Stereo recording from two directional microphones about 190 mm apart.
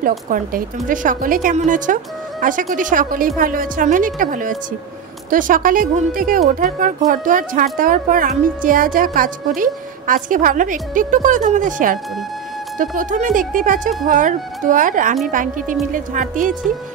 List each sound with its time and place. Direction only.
0.3 s a woman's voice: 50° right (ahead or behind)